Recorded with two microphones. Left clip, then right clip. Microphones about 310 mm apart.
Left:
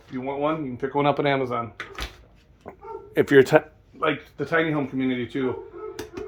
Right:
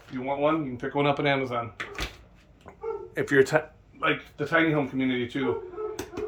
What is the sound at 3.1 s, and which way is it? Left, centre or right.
Speech, left.